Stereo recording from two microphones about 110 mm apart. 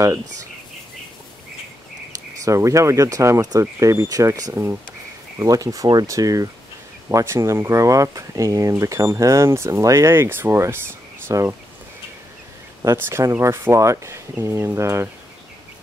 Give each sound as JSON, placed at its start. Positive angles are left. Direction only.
{"t": 2.4, "sound": "speech", "side_deg": -30}
{"t": 12.8, "sound": "speech", "side_deg": -25}